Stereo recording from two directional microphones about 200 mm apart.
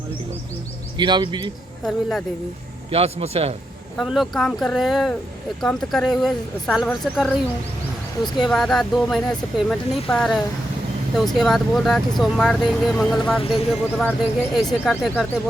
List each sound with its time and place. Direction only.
0.9 s speech: 25° right (ahead or behind)
1.8 s speech: centre (ahead or behind)
2.9 s speech: 30° right (ahead or behind)
3.9 s speech: centre (ahead or behind)
8.4 s speech: centre (ahead or behind)